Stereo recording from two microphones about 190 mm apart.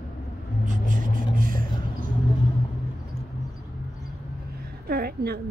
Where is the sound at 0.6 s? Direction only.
40° right (ahead or behind).